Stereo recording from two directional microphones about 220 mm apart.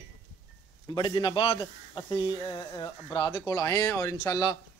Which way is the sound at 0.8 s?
20° left (ahead or behind).